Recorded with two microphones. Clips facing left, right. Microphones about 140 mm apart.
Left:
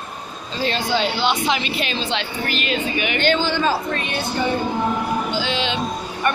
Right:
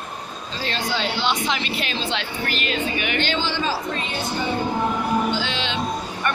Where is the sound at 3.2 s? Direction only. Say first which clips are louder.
Left 9 dB; 50° left (ahead or behind).